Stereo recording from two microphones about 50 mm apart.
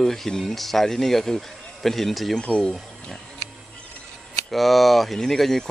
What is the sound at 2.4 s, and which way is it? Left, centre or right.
Speech, centre.